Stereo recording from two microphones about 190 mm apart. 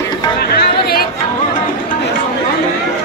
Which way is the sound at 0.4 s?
55° left (ahead or behind).